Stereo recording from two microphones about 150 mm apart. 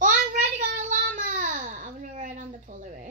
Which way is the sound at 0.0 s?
60° right (ahead or behind).